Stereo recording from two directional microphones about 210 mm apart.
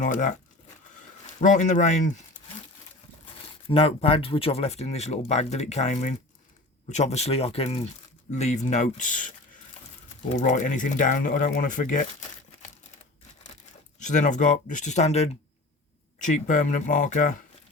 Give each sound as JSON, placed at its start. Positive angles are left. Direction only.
{"t": 0.0, "sound": "speech", "side_deg": 35}
{"t": 1.4, "sound": "speech", "side_deg": 35}
{"t": 3.7, "sound": "speech", "side_deg": 25}
{"t": 14.0, "sound": "speech", "side_deg": 35}